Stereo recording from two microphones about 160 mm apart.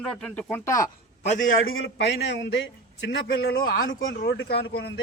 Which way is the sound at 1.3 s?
55° left (ahead or behind).